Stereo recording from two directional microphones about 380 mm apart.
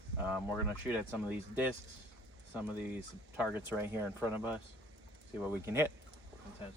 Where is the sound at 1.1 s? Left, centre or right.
Centre.